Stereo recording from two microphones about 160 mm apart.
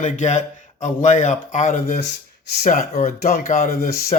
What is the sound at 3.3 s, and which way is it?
Speech, 60° left (ahead or behind).